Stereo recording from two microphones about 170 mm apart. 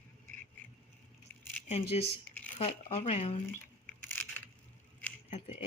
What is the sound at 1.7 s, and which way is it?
Speech, 35° left (ahead or behind).